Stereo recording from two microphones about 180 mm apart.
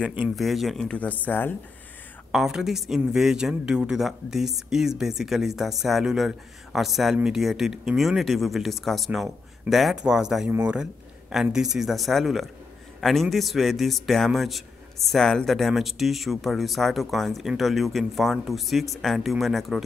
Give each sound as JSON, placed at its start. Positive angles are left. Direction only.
{"t": 0.0, "sound": "a man's voice", "side_deg": -5}
{"t": 2.3, "sound": "a man's voice", "side_deg": 0}